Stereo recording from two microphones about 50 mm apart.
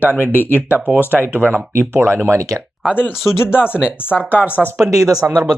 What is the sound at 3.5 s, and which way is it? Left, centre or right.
Speech, left.